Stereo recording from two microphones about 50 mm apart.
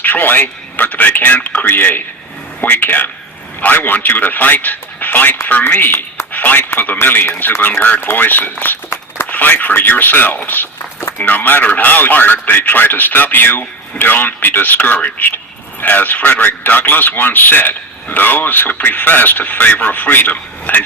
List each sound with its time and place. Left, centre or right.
0.0 s a man's voice: left